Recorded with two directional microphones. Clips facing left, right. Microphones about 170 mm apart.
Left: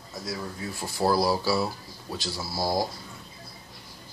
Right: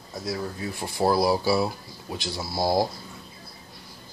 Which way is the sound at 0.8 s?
20° right (ahead or behind).